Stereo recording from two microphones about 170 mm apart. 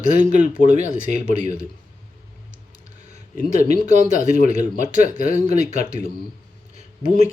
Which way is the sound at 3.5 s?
45° right (ahead or behind).